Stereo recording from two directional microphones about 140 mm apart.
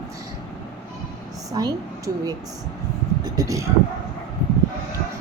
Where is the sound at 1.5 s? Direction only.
25° right (ahead or behind).